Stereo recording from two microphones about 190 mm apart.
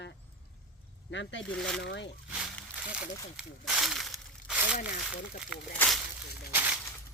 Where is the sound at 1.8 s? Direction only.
70° left (ahead or behind).